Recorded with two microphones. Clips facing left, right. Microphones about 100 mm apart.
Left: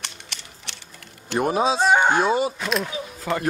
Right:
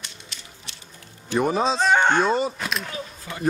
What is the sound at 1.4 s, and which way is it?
Speech, 5° left (ahead or behind).